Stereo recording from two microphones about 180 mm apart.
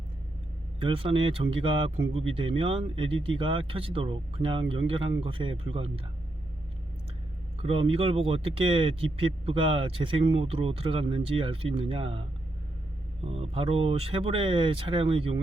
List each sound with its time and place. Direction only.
0.8 s speech: 30° right (ahead or behind)
7.6 s speech: 30° right (ahead or behind)
13.2 s speech: 30° right (ahead or behind)